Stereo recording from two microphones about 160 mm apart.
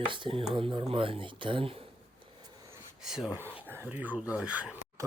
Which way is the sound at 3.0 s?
5° right (ahead or behind).